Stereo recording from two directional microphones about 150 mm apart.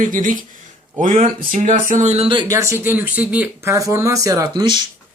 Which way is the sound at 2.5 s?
20° right (ahead or behind).